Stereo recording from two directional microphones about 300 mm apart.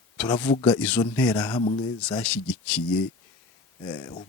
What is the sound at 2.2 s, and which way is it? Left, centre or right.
A man's voice, centre.